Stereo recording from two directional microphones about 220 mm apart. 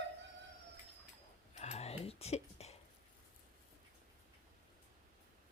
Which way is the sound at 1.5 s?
30° left (ahead or behind).